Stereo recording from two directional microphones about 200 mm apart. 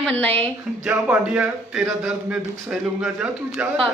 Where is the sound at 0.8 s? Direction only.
5° right (ahead or behind).